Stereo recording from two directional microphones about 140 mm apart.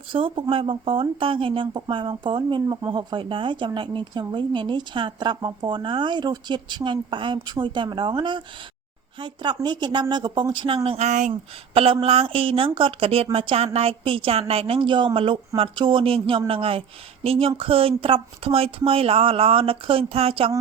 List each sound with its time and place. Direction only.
0.1 s speech: 40° right (ahead or behind)
10.8 s speech: 50° right (ahead or behind)